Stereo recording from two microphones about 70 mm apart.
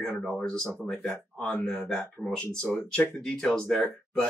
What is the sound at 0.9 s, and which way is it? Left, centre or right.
Speech, left.